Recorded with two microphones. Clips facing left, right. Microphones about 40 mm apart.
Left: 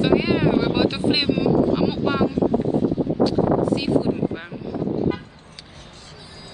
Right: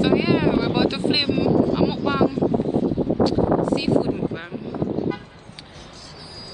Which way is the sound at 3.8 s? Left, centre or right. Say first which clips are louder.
Even; centre.